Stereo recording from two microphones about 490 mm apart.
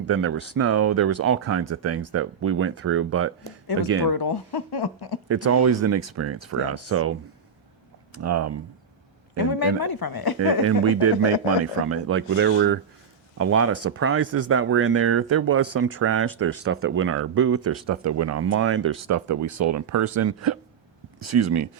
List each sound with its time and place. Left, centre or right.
0.0 s speech: right
4.1 s speech: left
5.3 s speech: right
8.2 s speech: right
9.4 s speech: left
11.0 s speech: right